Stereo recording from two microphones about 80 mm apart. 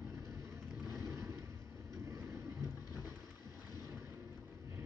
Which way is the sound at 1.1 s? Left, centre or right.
Right.